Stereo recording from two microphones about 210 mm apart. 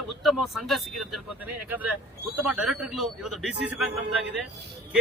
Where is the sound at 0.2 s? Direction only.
Centre (ahead or behind).